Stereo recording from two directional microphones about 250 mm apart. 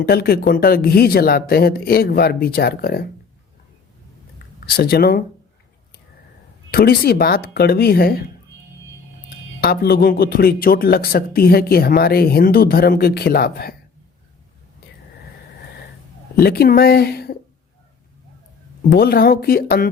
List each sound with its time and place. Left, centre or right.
0.1 s a man's voice: left
4.7 s a man's voice: left
6.7 s a man's voice: left
9.6 s a man's voice: left
14.8 s a sound: left
16.4 s a man's voice: left
18.9 s a man's voice: left